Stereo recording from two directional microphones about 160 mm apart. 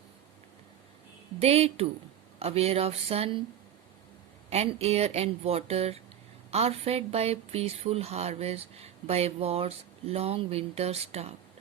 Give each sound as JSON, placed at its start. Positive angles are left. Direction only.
{"t": 1.4, "sound": "speech", "side_deg": -40}
{"t": 4.4, "sound": "speech", "side_deg": -40}